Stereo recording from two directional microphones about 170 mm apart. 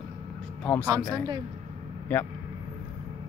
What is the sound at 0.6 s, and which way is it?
Speech, 10° left (ahead or behind).